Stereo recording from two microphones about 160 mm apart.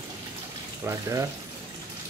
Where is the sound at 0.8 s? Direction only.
15° right (ahead or behind).